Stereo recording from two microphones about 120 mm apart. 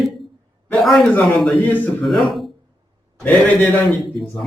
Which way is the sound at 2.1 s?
Centre (ahead or behind).